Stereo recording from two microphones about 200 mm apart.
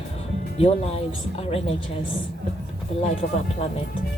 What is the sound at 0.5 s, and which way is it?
A woman's voice, 30° left (ahead or behind).